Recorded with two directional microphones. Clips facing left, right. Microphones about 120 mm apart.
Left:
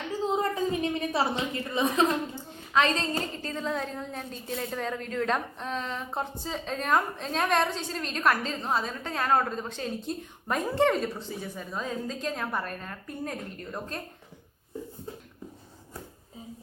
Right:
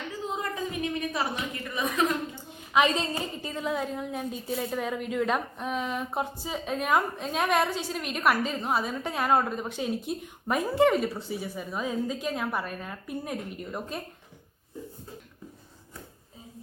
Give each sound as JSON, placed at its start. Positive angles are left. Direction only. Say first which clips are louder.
{"t": 0.1, "sound": "a woman's voice", "louder": "left 7 dB", "side_deg": 30}
{"t": 2.5, "sound": "a woman's voice", "louder": "right 2 dB", "side_deg": -15}